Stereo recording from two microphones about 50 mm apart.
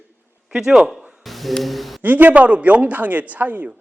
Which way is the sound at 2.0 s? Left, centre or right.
Right.